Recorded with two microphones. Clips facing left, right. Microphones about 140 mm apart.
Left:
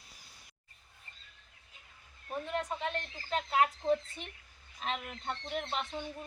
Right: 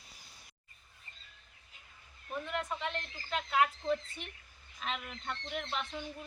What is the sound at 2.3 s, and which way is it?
Speech, 35° left (ahead or behind).